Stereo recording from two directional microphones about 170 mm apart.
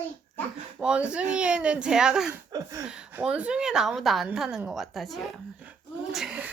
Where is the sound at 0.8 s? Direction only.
5° right (ahead or behind).